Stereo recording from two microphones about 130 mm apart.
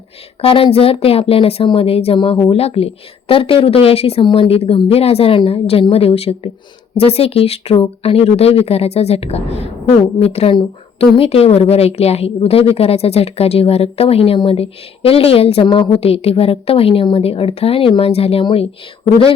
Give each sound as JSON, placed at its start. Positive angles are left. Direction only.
{"t": 0.4, "sound": "a woman's voice", "side_deg": 45}